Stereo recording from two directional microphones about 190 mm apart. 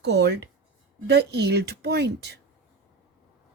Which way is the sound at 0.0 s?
65° right (ahead or behind).